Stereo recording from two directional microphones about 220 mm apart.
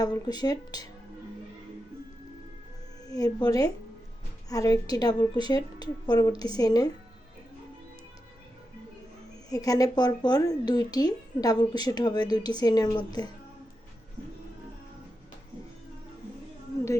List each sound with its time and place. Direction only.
0.0 s speech: 20° left (ahead or behind)
3.4 s speech: 15° left (ahead or behind)
9.5 s speech: 15° left (ahead or behind)